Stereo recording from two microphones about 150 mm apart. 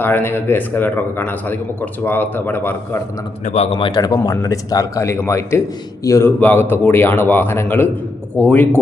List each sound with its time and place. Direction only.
0.0 s a man's voice: 15° left (ahead or behind)
3.4 s a man's voice: 45° left (ahead or behind); by 8.6 s 10° left (ahead or behind)